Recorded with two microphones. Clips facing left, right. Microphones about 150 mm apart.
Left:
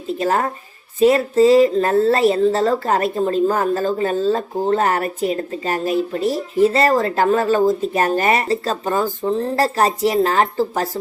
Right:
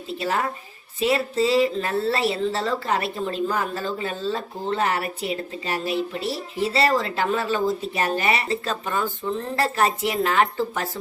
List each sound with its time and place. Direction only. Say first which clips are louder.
0.2 s a woman's voice: left 5 dB; 45° left (ahead or behind)